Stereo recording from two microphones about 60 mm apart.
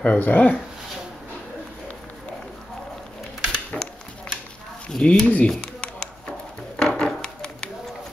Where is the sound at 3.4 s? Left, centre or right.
Centre.